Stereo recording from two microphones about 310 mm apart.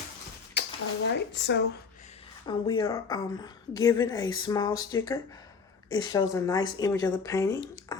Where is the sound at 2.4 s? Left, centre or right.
Centre.